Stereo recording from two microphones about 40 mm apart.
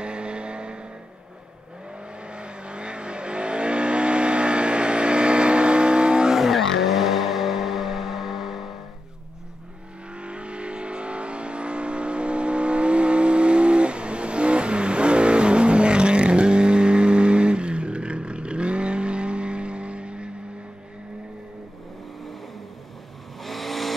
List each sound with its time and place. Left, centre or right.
0.0 s vehicle: right
2.2 s vehicle: right
6.3 s vehicle: centre
10.1 s vehicle: right
23.4 s vehicle: centre